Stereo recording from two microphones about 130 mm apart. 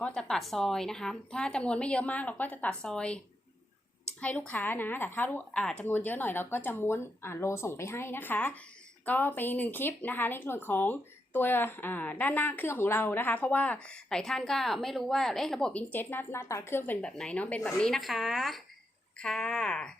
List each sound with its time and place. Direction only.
0.0 s speech: 5° left (ahead or behind)
4.2 s speech: 10° left (ahead or behind)